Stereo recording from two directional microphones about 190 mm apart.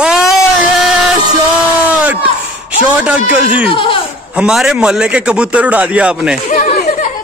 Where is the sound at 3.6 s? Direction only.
30° left (ahead or behind).